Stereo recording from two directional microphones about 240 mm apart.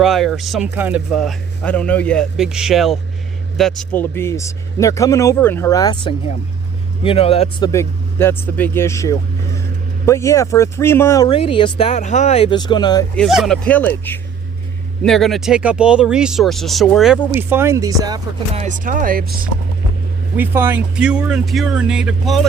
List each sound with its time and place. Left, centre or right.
0.0 s speech: centre; by 7.7 s left
7.7 s speech: centre
11.3 s speech: left
13.1 s speech: centre
18.6 s speech: right
20.3 s speech: centre